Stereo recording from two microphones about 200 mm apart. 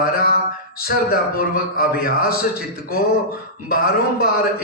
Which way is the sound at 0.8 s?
50° left (ahead or behind).